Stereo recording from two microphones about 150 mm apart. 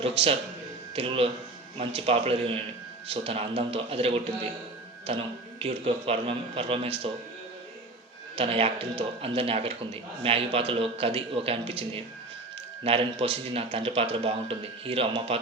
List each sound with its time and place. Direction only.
0.0 s speech: 40° right (ahead or behind)
8.4 s speech: 40° right (ahead or behind)